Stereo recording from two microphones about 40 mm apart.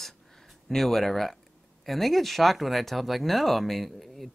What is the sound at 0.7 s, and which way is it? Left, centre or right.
Speech, centre.